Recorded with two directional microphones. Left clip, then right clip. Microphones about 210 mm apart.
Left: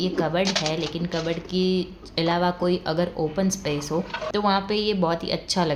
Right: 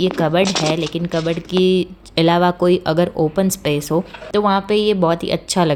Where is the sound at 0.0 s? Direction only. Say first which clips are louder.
Right 7 dB; 35° right (ahead or behind).